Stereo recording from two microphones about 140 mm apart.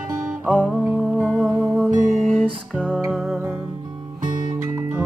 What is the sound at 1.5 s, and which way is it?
Music, 20° right (ahead or behind).